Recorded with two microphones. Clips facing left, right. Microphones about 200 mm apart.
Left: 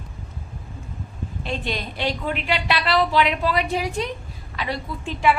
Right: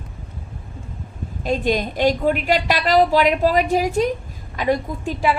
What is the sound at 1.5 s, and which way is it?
A woman's voice, 45° right (ahead or behind).